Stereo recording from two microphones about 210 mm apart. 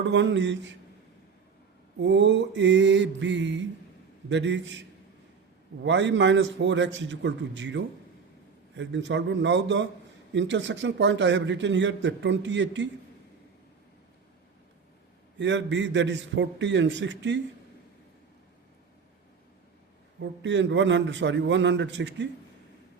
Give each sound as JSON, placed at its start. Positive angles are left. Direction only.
{"t": 0.1, "sound": "a man's voice", "side_deg": -60}
{"t": 2.0, "sound": "a man's voice", "side_deg": -60}
{"t": 5.8, "sound": "a man's voice", "side_deg": -60}
{"t": 15.4, "sound": "a man's voice", "side_deg": -60}
{"t": 20.1, "sound": "a man's voice", "side_deg": -60}